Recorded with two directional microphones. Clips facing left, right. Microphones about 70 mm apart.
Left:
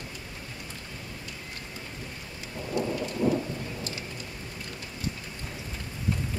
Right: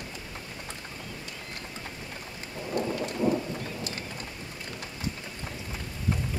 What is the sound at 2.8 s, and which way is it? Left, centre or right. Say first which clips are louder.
Thunder: even; right.